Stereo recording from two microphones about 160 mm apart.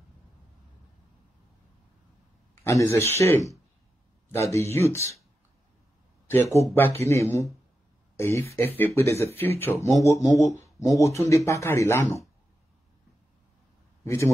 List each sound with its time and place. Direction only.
2.5 s a man's voice: 15° left (ahead or behind)
6.2 s speech: 15° left (ahead or behind)
14.0 s speech: 20° left (ahead or behind)